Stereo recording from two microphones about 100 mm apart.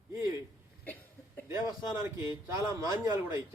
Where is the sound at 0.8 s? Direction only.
15° left (ahead or behind).